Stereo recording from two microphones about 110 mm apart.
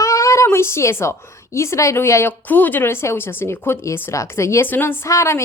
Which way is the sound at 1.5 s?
25° left (ahead or behind).